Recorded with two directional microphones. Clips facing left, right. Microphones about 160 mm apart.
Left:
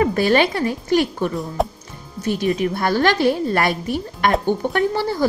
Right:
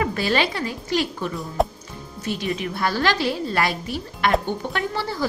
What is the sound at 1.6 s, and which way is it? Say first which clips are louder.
Speech: right 1 dB; centre (ahead or behind).